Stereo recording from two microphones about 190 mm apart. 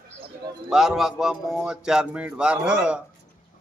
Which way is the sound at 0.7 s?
Centre (ahead or behind).